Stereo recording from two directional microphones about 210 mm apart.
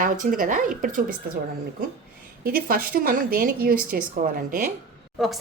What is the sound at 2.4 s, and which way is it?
A woman's voice, 45° right (ahead or behind).